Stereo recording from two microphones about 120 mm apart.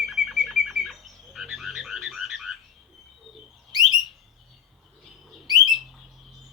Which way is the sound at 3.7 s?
35° right (ahead or behind).